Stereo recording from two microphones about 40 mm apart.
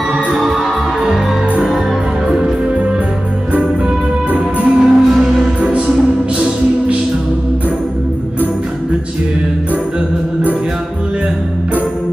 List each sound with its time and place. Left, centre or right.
2.2 s music: right
4.6 s music: centre
5.6 s music: right